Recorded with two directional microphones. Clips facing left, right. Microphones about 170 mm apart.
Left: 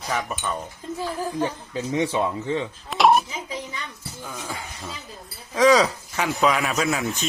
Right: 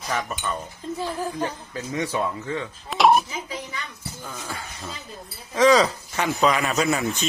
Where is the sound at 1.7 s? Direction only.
20° left (ahead or behind).